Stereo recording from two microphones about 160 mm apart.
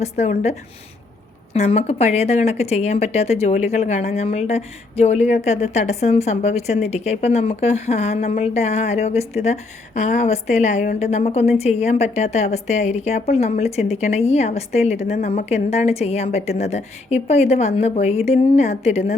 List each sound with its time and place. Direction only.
0.0 s speech: 45° left (ahead or behind)
1.5 s speech: 40° left (ahead or behind)